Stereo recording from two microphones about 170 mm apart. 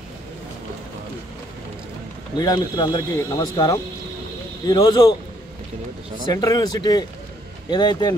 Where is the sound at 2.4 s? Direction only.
25° left (ahead or behind).